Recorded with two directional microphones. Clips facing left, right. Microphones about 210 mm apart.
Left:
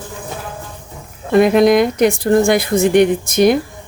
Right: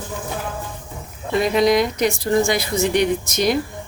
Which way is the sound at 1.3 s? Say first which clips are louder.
Left 6 dB; 55° left (ahead or behind).